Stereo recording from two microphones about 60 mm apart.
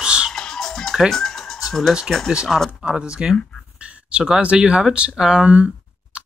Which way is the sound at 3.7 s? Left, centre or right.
Right.